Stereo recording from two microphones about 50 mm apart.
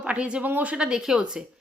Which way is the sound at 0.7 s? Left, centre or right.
Centre.